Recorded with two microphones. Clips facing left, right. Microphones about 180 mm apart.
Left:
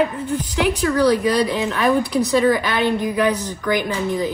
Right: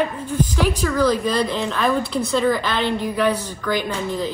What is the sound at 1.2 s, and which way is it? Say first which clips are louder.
A woman's voice: left 3 dB; 15° left (ahead or behind).